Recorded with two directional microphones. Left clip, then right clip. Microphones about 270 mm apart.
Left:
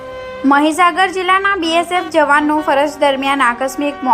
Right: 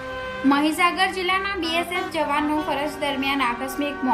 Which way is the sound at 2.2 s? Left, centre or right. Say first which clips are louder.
Left 12 dB; left.